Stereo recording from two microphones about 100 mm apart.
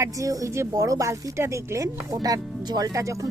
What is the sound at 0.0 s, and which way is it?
Speech, 35° right (ahead or behind).